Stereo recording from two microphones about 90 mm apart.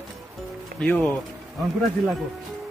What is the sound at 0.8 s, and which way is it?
Speech, 15° left (ahead or behind).